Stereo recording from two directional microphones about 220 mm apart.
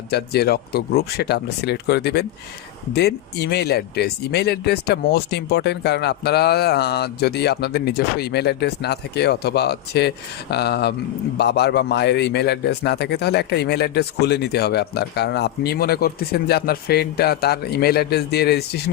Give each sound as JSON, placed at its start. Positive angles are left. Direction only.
{"t": 0.1, "sound": "a man's voice", "side_deg": 45}